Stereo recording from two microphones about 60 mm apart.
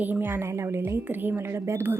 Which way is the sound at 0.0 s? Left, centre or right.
Right.